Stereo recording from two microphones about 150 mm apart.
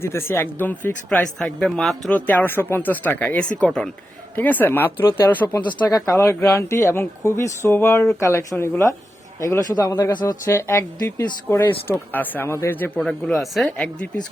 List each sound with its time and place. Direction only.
0.0 s speech: 15° left (ahead or behind)
5.5 s speech: 25° left (ahead or behind); by 14.1 s 10° left (ahead or behind)